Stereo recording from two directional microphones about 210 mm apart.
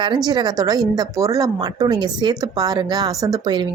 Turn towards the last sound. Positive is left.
turn(degrees=-20)  # may be behind; listen again after turning